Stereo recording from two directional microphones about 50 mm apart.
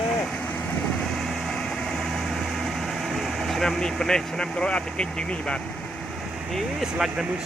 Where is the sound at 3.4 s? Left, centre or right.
Centre.